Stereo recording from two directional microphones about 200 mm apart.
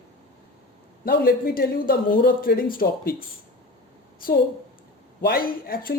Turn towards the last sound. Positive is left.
turn(degrees=45)  # may be behind; listen again after turning